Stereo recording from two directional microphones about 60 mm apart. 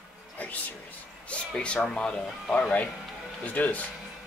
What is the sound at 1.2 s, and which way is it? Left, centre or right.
Speech, centre.